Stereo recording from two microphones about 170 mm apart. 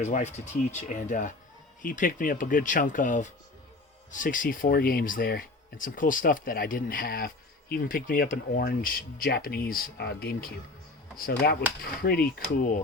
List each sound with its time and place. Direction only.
0.0 s speech: 45° left (ahead or behind); by 12.2 s 65° left (ahead or behind)